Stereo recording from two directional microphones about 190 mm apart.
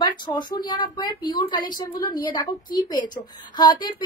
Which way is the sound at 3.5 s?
25° left (ahead or behind).